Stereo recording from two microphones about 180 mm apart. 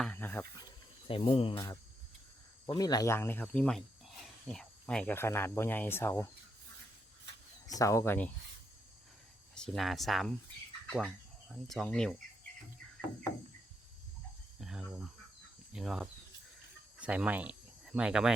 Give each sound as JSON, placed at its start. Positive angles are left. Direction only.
{"t": 0.0, "sound": "a sound", "side_deg": 10}
{"t": 1.0, "sound": "speech", "side_deg": 30}
{"t": 1.5, "sound": "speech", "side_deg": 20}
{"t": 7.7, "sound": "speech", "side_deg": 20}
{"t": 9.6, "sound": "speech", "side_deg": 0}
{"t": 14.6, "sound": "a sound", "side_deg": 0}
{"t": 15.7, "sound": "speech", "side_deg": 0}